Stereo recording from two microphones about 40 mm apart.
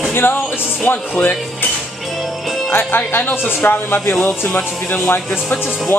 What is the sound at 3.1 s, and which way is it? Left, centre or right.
Speech, left.